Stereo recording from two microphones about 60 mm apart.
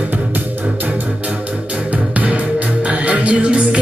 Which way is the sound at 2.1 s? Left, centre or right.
Right.